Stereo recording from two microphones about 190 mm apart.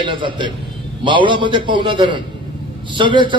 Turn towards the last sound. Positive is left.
turn(degrees=-25)  # may be behind; listen again after turning